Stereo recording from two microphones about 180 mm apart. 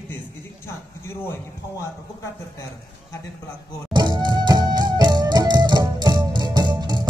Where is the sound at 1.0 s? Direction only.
15° left (ahead or behind).